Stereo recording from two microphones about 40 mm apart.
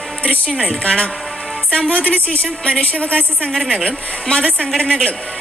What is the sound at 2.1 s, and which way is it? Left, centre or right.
A woman's voice, left.